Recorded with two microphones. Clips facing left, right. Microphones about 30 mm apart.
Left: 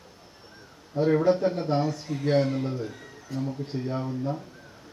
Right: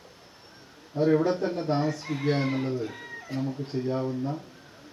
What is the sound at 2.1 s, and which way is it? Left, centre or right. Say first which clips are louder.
Speech: even; right.